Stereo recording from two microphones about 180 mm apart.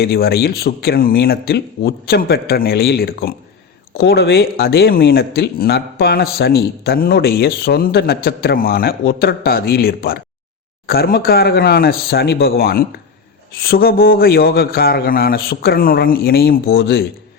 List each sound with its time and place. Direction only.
0.0 s speech: 60° left (ahead or behind)